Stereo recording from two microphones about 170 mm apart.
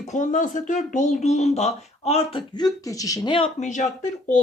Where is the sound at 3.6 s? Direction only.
45° left (ahead or behind).